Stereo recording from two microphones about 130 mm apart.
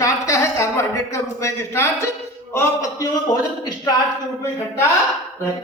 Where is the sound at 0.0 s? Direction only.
25° left (ahead or behind).